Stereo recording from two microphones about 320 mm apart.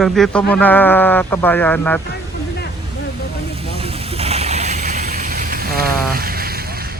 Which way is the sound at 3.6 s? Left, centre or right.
Centre.